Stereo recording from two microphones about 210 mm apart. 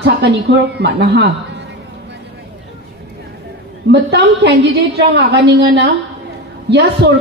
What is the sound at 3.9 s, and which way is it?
A woman's voice, 55° right (ahead or behind).